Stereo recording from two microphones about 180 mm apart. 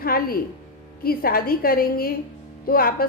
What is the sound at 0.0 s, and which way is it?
A woman's voice, 55° left (ahead or behind).